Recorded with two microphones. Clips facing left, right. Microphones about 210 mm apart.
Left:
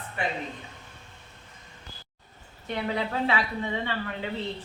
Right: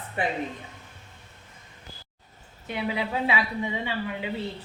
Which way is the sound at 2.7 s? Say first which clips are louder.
Even; 10° right (ahead or behind).